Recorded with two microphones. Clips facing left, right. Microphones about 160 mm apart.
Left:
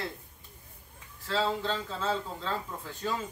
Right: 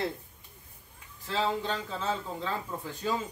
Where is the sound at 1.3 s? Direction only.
15° right (ahead or behind).